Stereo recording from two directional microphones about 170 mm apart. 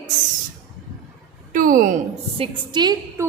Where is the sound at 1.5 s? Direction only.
55° right (ahead or behind).